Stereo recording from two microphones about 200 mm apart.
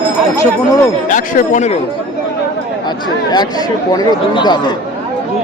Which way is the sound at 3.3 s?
20° left (ahead or behind).